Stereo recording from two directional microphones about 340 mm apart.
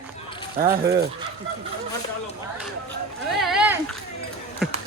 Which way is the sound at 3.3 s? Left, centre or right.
Centre.